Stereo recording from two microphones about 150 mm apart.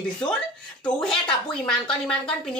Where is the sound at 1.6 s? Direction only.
5° left (ahead or behind).